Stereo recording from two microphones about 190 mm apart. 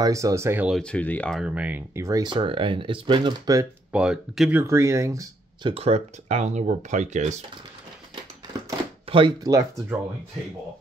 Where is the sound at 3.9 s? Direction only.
5° right (ahead or behind); by 7.4 s 40° right (ahead or behind).